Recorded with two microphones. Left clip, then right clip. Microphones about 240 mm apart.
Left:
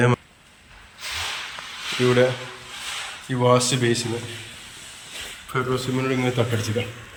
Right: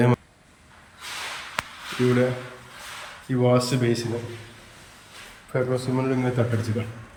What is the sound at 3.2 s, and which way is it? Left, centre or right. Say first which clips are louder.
Speech: left 3 dB; centre.